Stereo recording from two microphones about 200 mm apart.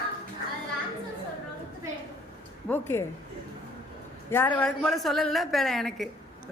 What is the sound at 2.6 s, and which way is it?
Speech, 10° left (ahead or behind).